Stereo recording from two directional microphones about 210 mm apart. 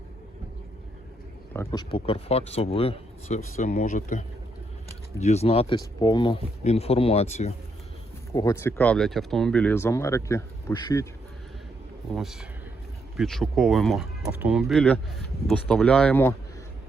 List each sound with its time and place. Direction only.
1.5 s speech: 20° left (ahead or behind); by 4.2 s 35° left (ahead or behind)
5.2 s speech: 30° left (ahead or behind)
8.3 s speech: 15° left (ahead or behind)
12.1 s speech: centre (ahead or behind)